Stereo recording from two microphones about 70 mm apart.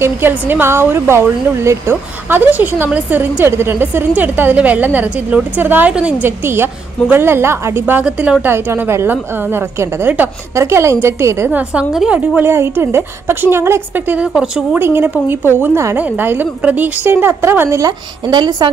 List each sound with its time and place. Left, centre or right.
0.3 s a woman's voice: right
5.9 s a woman's voice: centre
6.2 s a woman's voice: right
8.2 s a woman's voice: right
8.5 s a woman's voice: right
10.5 s a woman's voice: right
13.9 s a woman's voice: right
14.2 s a woman's voice: centre
15.0 s a woman's voice: right
17.7 s a woman's voice: right